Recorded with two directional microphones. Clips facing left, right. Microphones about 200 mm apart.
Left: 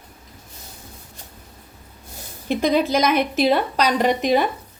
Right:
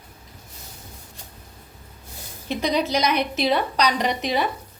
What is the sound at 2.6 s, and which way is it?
A woman's voice, 50° left (ahead or behind).